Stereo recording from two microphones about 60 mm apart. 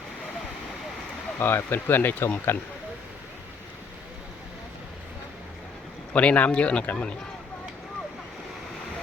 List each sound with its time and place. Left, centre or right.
1.4 s speech: left
6.1 s speech: left